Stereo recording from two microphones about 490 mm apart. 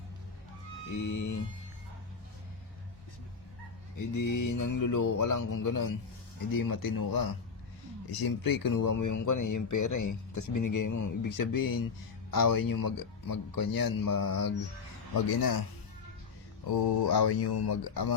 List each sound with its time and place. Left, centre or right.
1.0 s speech: left
4.1 s speech: left
16.8 s speech: left